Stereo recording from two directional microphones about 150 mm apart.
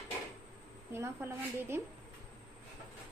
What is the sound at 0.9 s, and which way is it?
Speech, 15° right (ahead or behind).